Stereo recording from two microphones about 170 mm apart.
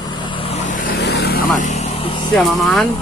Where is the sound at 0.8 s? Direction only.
70° left (ahead or behind).